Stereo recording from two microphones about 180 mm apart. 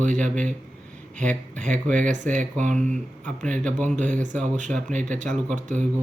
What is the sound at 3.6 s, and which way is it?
Speech, 5° left (ahead or behind).